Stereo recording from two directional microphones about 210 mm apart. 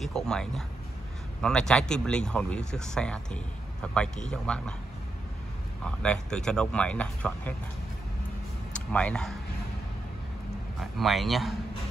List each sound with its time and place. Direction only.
0.0 s speech: centre (ahead or behind)
6.0 s speech: 5° left (ahead or behind)
8.7 s speech: 5° left (ahead or behind)
10.8 s speech: centre (ahead or behind)